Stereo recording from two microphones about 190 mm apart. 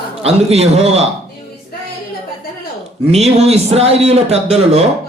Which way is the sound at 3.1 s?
35° right (ahead or behind).